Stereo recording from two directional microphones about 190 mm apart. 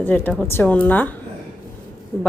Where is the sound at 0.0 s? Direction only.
10° left (ahead or behind).